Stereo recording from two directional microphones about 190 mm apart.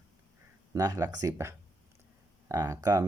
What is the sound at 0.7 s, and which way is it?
Speech, 15° right (ahead or behind).